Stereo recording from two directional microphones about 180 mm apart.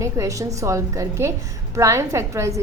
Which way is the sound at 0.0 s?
15° right (ahead or behind).